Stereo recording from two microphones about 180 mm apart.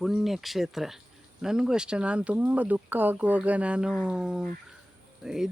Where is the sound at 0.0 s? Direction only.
Centre (ahead or behind).